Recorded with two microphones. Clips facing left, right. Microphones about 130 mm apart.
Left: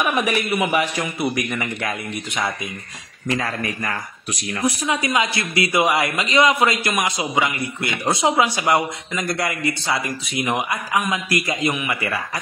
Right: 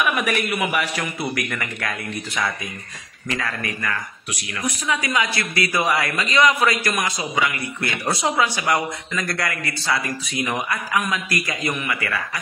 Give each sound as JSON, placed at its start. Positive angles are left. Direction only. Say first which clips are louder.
{"t": 0.0, "sound": "a man's voice", "louder": "left 1 dB", "side_deg": 25}